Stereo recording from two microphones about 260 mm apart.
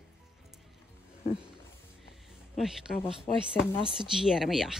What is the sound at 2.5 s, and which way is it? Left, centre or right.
Speech, centre.